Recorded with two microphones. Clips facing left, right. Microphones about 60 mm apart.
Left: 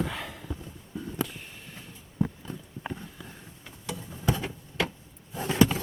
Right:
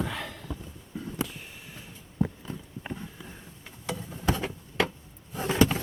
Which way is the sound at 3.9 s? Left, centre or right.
Right.